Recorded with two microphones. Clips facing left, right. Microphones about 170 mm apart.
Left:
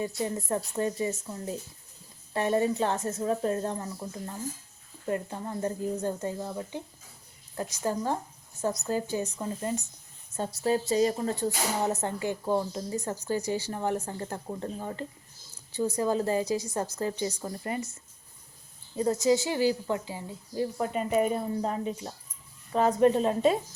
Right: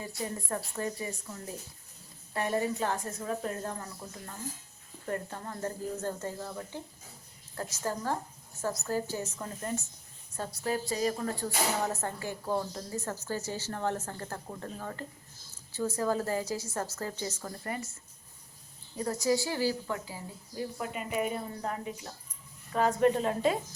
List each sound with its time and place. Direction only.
0.0 s speech: 20° left (ahead or behind)
5.0 s a woman's voice: 15° left (ahead or behind)
18.9 s speech: 20° left (ahead or behind)
21.6 s speech: 25° left (ahead or behind)